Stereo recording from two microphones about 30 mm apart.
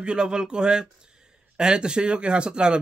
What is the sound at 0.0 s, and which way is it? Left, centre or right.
Speech, right.